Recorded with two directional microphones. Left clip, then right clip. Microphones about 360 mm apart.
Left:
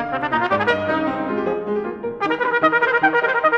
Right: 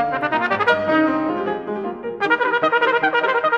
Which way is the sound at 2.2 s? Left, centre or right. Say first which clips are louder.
Even; right.